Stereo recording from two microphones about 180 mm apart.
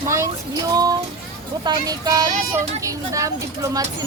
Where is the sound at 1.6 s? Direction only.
20° right (ahead or behind).